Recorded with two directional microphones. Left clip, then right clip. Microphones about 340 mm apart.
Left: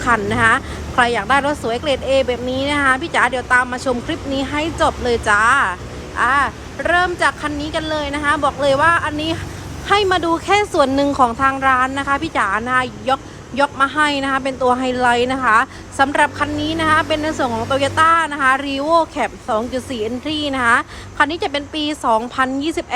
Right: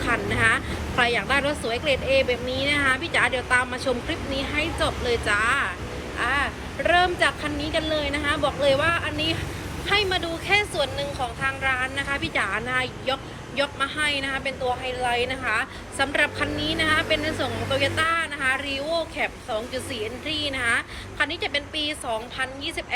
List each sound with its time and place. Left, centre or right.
0.0 s a woman's voice: centre